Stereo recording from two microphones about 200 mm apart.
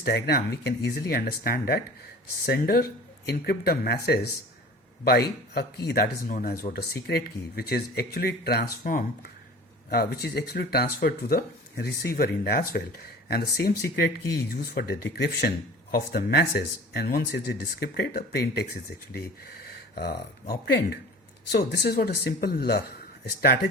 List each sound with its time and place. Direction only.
0.0 s speech: 55° left (ahead or behind)
5.5 s speech: 55° left (ahead or behind)